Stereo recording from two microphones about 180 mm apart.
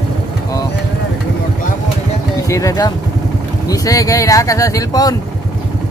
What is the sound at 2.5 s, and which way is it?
Speech, 15° left (ahead or behind).